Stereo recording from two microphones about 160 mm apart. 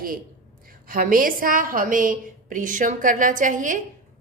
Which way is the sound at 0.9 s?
60° right (ahead or behind).